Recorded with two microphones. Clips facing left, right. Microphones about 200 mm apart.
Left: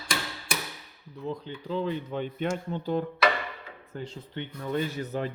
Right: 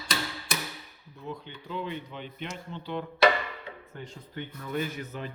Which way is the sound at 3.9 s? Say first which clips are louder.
Left 5 dB; 30° left (ahead or behind).